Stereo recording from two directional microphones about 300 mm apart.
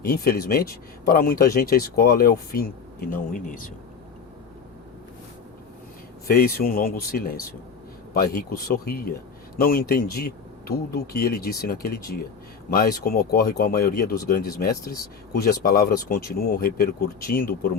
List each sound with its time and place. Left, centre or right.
0.0 s speech: left
6.2 s speech: left